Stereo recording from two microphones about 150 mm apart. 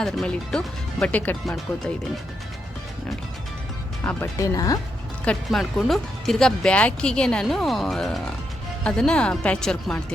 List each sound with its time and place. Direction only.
0.0 s speech: 5° left (ahead or behind)
4.0 s speech: 10° left (ahead or behind)
4.4 s speech: 25° left (ahead or behind)
5.2 s speech: 5° left (ahead or behind)